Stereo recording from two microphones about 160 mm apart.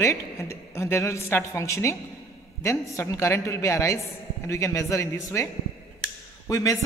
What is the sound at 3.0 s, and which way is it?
A woman's voice, 15° left (ahead or behind).